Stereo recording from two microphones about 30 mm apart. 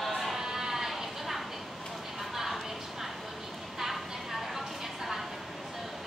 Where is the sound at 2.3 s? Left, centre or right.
Centre.